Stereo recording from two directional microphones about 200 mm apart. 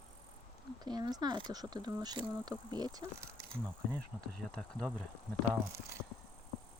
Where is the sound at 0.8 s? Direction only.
20° right (ahead or behind).